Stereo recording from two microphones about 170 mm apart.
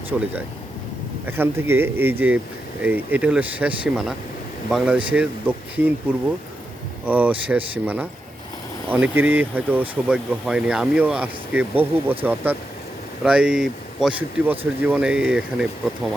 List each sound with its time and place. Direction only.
0.1 s speech: 5° right (ahead or behind)